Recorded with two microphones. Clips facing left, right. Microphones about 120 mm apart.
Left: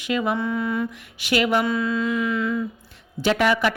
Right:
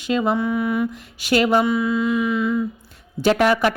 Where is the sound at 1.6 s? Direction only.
15° right (ahead or behind).